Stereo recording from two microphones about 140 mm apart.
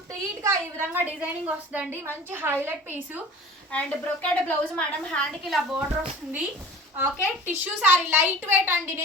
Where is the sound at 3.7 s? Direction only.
10° left (ahead or behind).